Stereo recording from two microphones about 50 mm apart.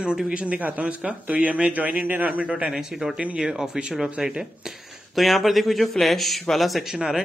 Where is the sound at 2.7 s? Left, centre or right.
Centre.